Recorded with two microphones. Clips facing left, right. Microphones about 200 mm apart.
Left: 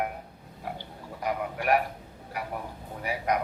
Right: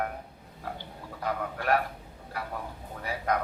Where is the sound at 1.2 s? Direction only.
15° left (ahead or behind).